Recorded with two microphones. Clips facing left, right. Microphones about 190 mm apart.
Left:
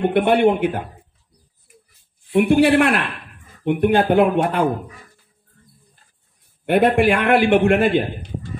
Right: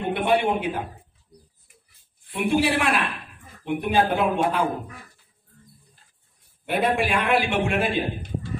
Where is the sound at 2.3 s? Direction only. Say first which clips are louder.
Left 8 dB; 55° left (ahead or behind).